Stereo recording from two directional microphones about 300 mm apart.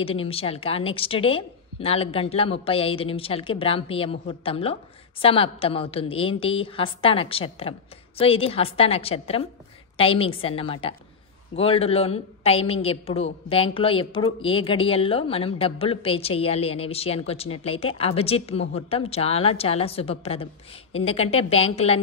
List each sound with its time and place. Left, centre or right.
0.0 s a woman's voice: centre